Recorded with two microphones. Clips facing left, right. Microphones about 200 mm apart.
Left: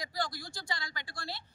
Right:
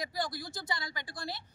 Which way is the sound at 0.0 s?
20° right (ahead or behind).